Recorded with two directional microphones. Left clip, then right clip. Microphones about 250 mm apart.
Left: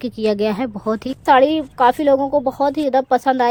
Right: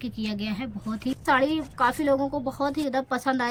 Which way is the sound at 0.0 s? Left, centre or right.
Centre.